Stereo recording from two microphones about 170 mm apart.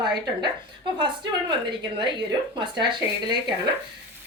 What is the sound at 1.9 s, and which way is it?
A woman's voice, 25° right (ahead or behind).